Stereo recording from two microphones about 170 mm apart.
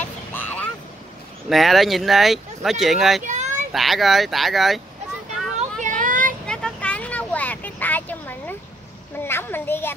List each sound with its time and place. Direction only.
0.0 s vehicle: 10° left (ahead or behind)
1.5 s speech: centre (ahead or behind)
3.3 s a sound: 45° right (ahead or behind)
3.7 s speech: centre (ahead or behind)
5.8 s child singing: 50° right (ahead or behind)
6.4 s vehicle: 5° left (ahead or behind)
9.2 s a sound: 15° left (ahead or behind)